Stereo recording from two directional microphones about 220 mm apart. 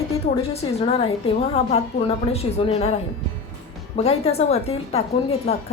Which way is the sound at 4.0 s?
30° left (ahead or behind).